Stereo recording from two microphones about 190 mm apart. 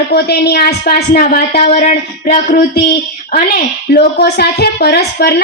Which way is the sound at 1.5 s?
40° left (ahead or behind).